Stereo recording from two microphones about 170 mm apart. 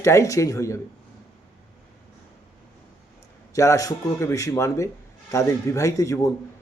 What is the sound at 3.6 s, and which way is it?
A man's voice, 20° left (ahead or behind).